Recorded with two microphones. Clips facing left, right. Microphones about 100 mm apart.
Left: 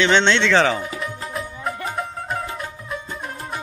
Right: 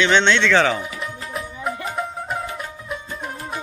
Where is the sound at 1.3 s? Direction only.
5° right (ahead or behind).